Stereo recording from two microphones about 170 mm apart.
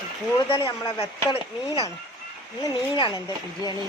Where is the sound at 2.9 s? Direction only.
25° left (ahead or behind).